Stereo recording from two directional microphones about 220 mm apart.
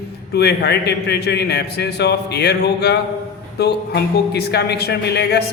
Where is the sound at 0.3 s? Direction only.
50° left (ahead or behind).